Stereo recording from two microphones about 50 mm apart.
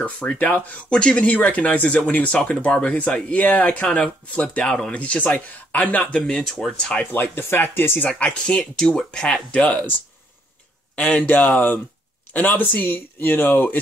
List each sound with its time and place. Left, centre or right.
0.0 s speech: left
6.2 s speech: centre
7.1 s speech: left
8.0 s speech: left
11.1 s speech: left